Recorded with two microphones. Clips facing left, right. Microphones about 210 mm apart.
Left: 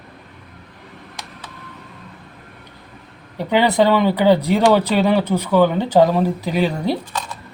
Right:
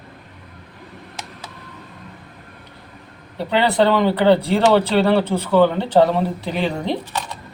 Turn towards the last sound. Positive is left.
turn(degrees=10)  # may be behind; listen again after turning